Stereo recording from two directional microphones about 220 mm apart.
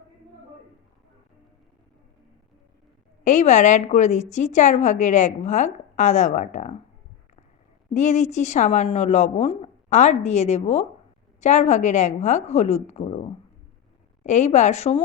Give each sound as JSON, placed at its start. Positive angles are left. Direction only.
{"t": 3.2, "sound": "a woman's voice", "side_deg": 35}
{"t": 7.9, "sound": "a woman's voice", "side_deg": 30}
{"t": 14.3, "sound": "a woman's voice", "side_deg": 30}